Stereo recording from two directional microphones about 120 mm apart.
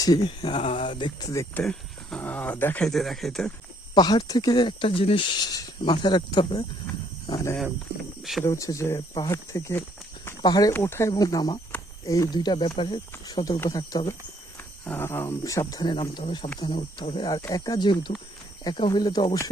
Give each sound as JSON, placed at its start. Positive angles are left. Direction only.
{"t": 0.3, "sound": "speech", "side_deg": 45}
{"t": 1.6, "sound": "speech", "side_deg": 5}
{"t": 2.8, "sound": "speech", "side_deg": 0}
{"t": 3.9, "sound": "speech", "side_deg": 35}
{"t": 8.2, "sound": "speech", "side_deg": 0}
{"t": 8.4, "sound": "speech", "side_deg": 25}
{"t": 10.8, "sound": "speech", "side_deg": 20}
{"t": 13.2, "sound": "speech", "side_deg": 35}
{"t": 14.8, "sound": "speech", "side_deg": 15}